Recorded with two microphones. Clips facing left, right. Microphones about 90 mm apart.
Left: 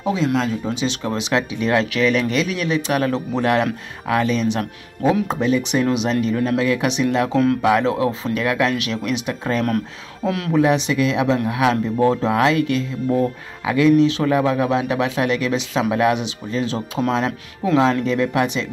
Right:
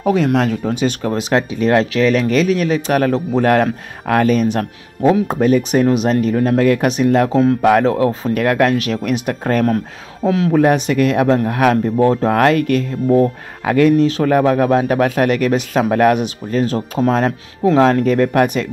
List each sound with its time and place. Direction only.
0.0 s speech: 60° right (ahead or behind)
10.2 s speech: 35° right (ahead or behind)
10.6 s speech: 50° right (ahead or behind)